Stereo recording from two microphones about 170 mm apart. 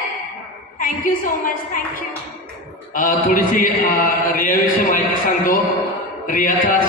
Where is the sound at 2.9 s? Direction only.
55° left (ahead or behind).